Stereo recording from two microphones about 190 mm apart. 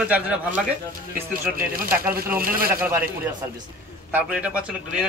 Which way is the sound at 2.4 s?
50° right (ahead or behind).